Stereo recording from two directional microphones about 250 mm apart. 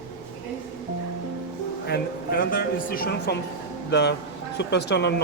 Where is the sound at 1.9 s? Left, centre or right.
Left.